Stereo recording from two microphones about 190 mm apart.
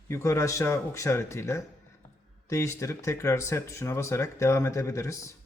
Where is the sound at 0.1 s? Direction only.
15° left (ahead or behind).